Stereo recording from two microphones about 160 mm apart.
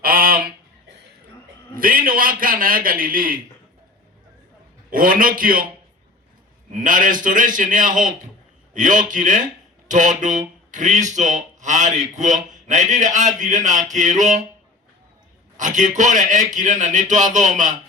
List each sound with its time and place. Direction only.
0.0 s goose: 65° right (ahead or behind)
1.7 s a man's voice: 60° right (ahead or behind)
4.9 s a man's voice: 60° right (ahead or behind)
6.7 s a man's voice: 55° right (ahead or behind)
15.5 s speech: 50° right (ahead or behind)